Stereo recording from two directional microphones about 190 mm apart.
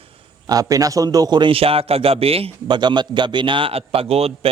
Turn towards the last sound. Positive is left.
turn(degrees=-30)  # may be behind; listen again after turning